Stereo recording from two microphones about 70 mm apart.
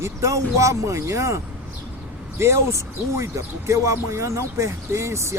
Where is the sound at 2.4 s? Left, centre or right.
Right.